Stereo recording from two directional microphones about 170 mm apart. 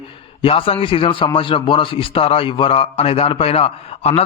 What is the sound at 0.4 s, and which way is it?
A man's voice, 35° left (ahead or behind).